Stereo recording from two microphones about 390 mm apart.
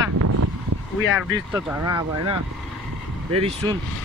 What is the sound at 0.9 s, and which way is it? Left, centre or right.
Speech, left.